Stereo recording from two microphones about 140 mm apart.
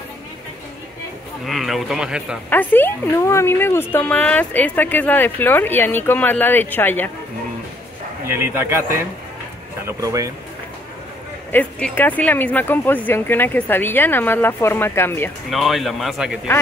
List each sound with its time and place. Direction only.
1.4 s speech: centre (ahead or behind)
2.5 s a woman's voice: 15° left (ahead or behind)
8.3 s speech: 15° right (ahead or behind)
9.8 s speech: 25° right (ahead or behind)
11.5 s a woman's voice: 15° left (ahead or behind)
15.5 s speech: centre (ahead or behind)